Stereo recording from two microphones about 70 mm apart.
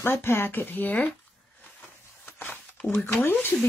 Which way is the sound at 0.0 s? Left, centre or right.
Left.